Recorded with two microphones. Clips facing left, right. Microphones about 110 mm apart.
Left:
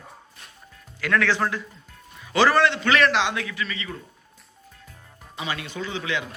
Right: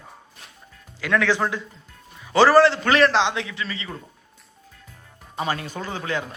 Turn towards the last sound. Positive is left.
turn(degrees=-40)  # may be behind; listen again after turning